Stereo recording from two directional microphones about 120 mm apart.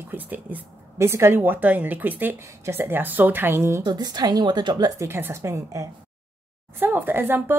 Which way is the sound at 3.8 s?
35° right (ahead or behind).